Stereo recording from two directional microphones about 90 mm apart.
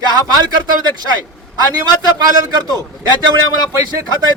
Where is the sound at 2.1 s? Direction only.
45° right (ahead or behind).